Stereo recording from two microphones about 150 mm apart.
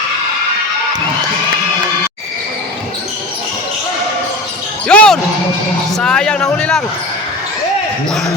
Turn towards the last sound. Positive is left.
turn(degrees=5)  # may be behind; listen again after turning